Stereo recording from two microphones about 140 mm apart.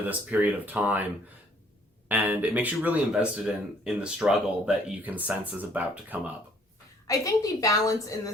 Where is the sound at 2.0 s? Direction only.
10° right (ahead or behind).